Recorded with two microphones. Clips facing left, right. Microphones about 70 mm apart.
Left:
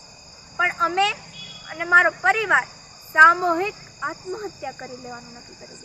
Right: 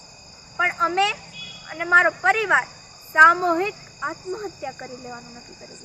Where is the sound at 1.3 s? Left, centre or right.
Left.